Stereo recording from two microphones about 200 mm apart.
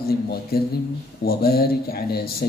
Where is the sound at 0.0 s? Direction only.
50° left (ahead or behind).